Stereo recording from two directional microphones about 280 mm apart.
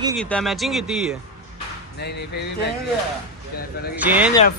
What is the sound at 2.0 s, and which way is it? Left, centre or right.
Speech, left.